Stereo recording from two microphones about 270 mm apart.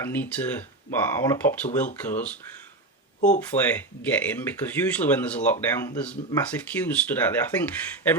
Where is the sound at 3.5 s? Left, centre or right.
Left.